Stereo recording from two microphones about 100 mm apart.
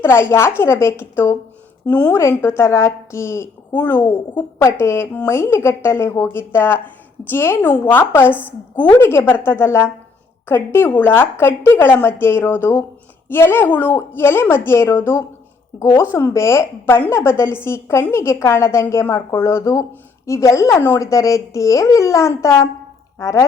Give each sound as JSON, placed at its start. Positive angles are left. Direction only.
{"t": 0.0, "sound": "a woman's voice", "side_deg": 25}
{"t": 2.1, "sound": "a woman's voice", "side_deg": 25}